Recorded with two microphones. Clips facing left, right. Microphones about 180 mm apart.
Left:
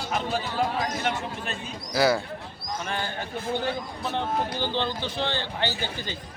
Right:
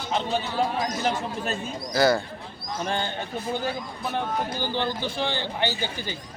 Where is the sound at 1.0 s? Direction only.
40° right (ahead or behind).